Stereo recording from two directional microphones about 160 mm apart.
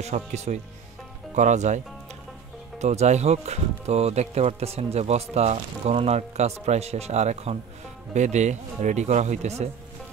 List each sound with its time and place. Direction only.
0.0 s speech: 45° right (ahead or behind)
2.8 s speech: 45° right (ahead or behind)